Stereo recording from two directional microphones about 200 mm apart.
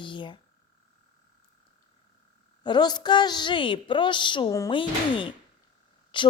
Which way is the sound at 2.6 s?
20° left (ahead or behind).